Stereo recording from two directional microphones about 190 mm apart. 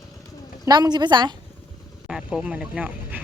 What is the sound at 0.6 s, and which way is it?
Speech, 20° right (ahead or behind).